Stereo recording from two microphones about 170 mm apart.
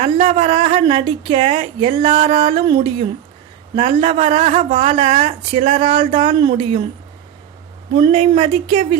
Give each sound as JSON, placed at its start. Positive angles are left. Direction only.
{"t": 0.0, "sound": "speech", "side_deg": -35}
{"t": 7.9, "sound": "speech", "side_deg": -35}